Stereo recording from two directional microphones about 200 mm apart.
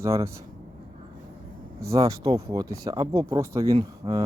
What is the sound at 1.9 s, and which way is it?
Speech, 15° right (ahead or behind).